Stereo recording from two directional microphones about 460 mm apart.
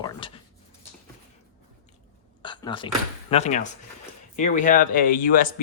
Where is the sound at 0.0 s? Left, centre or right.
Centre.